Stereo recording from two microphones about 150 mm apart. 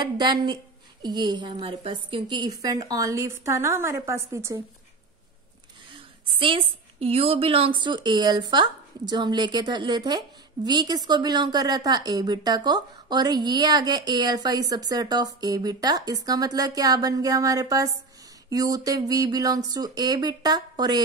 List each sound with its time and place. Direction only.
0.0 s a woman's voice: 30° right (ahead or behind)
5.9 s a woman's voice: 35° right (ahead or behind)